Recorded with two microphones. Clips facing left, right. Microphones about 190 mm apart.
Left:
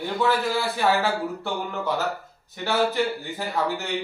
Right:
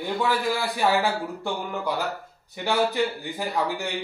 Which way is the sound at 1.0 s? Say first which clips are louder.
Even; 15° right (ahead or behind).